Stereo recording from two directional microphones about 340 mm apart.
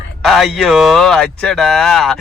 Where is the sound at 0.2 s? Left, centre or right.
Centre.